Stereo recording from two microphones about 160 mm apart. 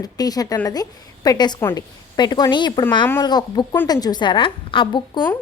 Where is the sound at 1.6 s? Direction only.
15° left (ahead or behind).